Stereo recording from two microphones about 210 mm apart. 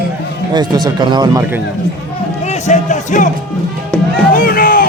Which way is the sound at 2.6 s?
35° left (ahead or behind).